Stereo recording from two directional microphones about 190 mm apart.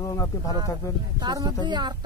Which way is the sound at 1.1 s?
20° right (ahead or behind).